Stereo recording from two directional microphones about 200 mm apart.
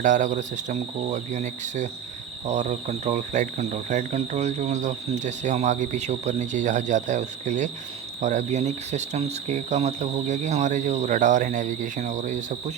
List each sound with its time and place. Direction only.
0.0 s cricket: 40° right (ahead or behind)